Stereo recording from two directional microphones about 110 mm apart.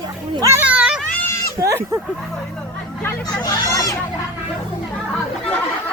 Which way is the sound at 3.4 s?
35° left (ahead or behind).